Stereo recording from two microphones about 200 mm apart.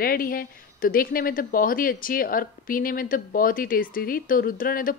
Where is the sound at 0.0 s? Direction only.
45° left (ahead or behind).